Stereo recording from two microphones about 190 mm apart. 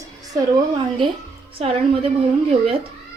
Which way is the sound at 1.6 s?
30° right (ahead or behind).